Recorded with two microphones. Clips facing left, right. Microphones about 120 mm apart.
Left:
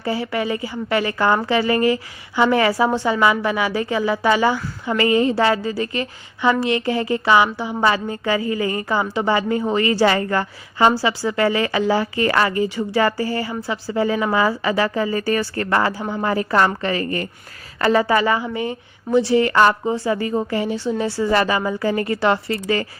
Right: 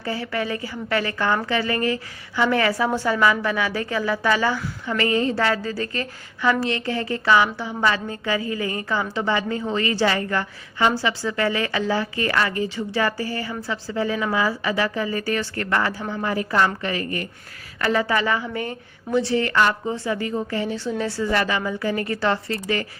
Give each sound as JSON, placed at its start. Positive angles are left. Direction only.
{"t": 0.0, "sound": "a woman's voice", "side_deg": 20}
{"t": 3.0, "sound": "a woman's voice", "side_deg": 15}
{"t": 7.8, "sound": "a woman's voice", "side_deg": 30}
{"t": 9.9, "sound": "a woman's voice", "side_deg": 40}
{"t": 16.2, "sound": "a woman's voice", "side_deg": 45}
{"t": 18.5, "sound": "speech", "side_deg": 10}
{"t": 19.5, "sound": "a woman's voice", "side_deg": 35}
{"t": 22.0, "sound": "a woman's voice", "side_deg": 25}